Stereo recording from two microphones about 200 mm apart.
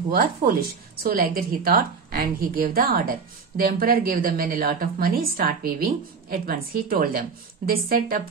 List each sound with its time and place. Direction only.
1.0 s a woman's voice: 50° right (ahead or behind)